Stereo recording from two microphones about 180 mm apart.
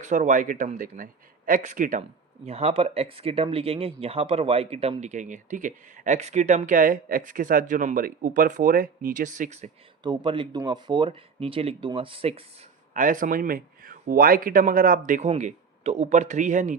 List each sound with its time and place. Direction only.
0.0 s speech: 45° right (ahead or behind)
2.5 s speech: 35° right (ahead or behind)
10.0 s speech: 25° right (ahead or behind)
12.9 s speech: 50° right (ahead or behind)